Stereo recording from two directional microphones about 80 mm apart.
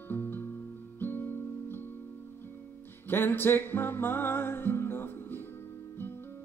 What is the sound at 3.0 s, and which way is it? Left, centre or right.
Music, left.